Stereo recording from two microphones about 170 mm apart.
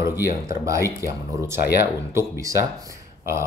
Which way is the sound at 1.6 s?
70° left (ahead or behind).